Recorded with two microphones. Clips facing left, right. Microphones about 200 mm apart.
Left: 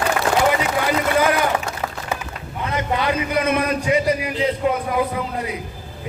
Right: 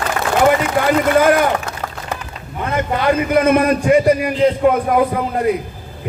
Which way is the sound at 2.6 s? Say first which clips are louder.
Right 5 dB; 50° right (ahead or behind).